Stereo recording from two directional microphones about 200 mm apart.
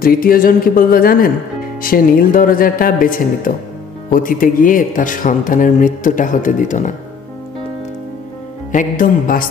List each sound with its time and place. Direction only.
0.0 s speech: 45° left (ahead or behind)
8.7 s speech: 40° left (ahead or behind)